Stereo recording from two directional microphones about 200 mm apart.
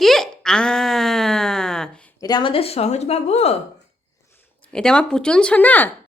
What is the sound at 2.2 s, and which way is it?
Speech, 20° left (ahead or behind).